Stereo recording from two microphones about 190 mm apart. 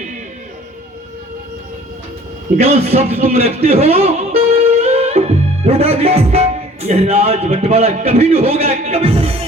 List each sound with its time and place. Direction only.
2.6 s speech: 35° right (ahead or behind)